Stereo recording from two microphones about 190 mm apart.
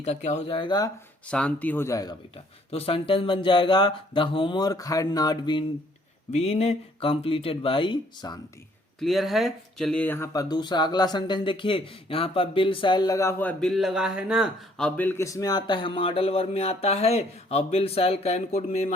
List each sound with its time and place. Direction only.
0.0 s speech: 35° left (ahead or behind)
1.3 s speech: 5° left (ahead or behind); by 5.6 s 20° left (ahead or behind)
6.3 s speech: 35° left (ahead or behind)
9.0 s speech: centre (ahead or behind); by 18.9 s 35° left (ahead or behind)